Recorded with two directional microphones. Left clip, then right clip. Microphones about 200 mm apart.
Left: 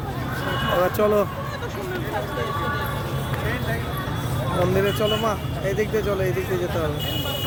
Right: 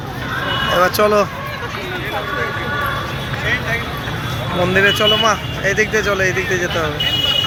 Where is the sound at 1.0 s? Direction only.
5° left (ahead or behind).